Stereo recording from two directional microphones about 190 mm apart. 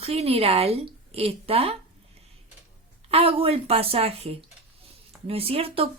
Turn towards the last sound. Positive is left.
turn(degrees=-30)  # may be behind; listen again after turning